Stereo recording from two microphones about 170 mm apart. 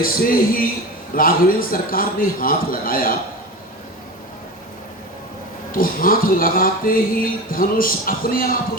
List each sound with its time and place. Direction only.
0.0 s speech: 60° left (ahead or behind)
5.7 s speech: 55° left (ahead or behind)